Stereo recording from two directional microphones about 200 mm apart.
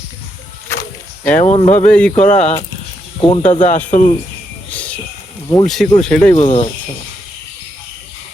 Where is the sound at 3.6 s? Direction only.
10° left (ahead or behind).